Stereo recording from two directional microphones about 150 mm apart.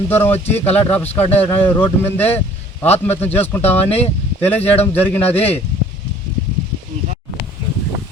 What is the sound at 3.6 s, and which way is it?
Speech, 45° left (ahead or behind).